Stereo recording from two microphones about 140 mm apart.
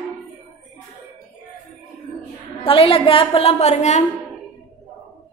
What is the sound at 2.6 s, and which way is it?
A woman's voice, 40° left (ahead or behind).